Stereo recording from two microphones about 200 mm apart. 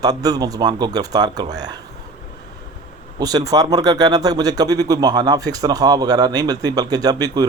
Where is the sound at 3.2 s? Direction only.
20° right (ahead or behind).